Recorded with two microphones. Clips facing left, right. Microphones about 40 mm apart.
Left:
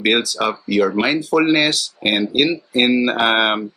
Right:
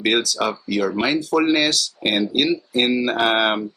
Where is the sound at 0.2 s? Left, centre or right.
Centre.